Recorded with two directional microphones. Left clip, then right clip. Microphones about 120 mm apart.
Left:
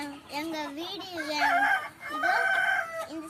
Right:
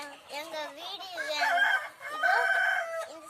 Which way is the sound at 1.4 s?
25° right (ahead or behind).